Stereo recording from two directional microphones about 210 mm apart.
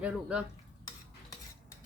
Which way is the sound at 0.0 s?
5° right (ahead or behind).